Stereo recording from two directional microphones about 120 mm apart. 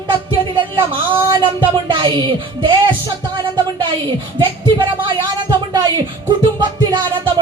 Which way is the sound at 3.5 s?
40° right (ahead or behind).